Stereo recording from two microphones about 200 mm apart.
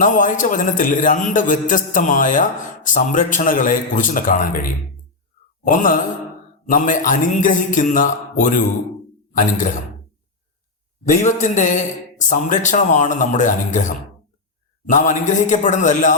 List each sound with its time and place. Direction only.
0.0 s a man's voice: 40° left (ahead or behind)
5.6 s mantra: 45° left (ahead or behind)
6.7 s a man's voice: 40° left (ahead or behind)
11.0 s a man's voice: 35° left (ahead or behind)